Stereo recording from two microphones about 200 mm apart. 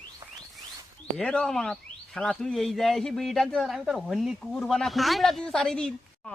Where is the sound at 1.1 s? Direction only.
5° left (ahead or behind).